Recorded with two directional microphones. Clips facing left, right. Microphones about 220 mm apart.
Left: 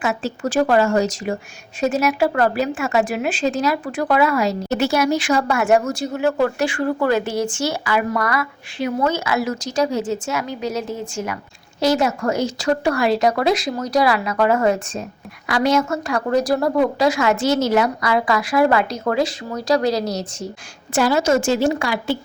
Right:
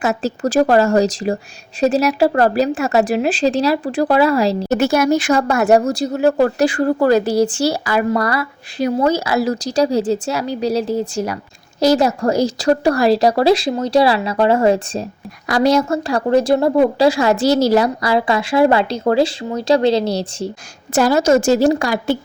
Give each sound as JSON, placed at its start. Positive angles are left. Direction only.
{"t": 0.0, "sound": "speech", "side_deg": -40}
{"t": 4.7, "sound": "a woman's voice", "side_deg": -50}
{"t": 20.9, "sound": "speech", "side_deg": -40}